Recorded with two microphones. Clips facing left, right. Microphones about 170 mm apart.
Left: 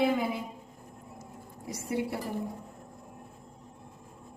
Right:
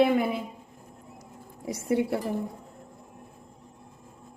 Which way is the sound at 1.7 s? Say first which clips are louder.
Right 6 dB; 60° right (ahead or behind).